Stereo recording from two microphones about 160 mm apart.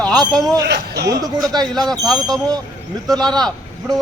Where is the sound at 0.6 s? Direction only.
90° right.